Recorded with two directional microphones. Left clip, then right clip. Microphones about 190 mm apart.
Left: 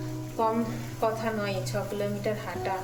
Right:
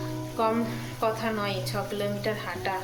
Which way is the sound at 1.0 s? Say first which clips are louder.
Right 1 dB; 5° left (ahead or behind).